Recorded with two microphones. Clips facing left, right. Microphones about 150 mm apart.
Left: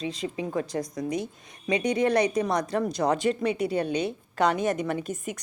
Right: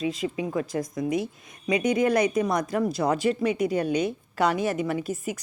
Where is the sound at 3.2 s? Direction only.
35° left (ahead or behind).